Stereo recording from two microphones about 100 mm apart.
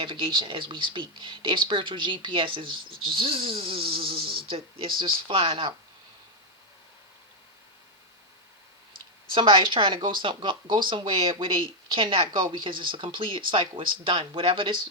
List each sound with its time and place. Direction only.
0.0 s speech: 55° right (ahead or behind)
9.3 s speech: 55° right (ahead or behind)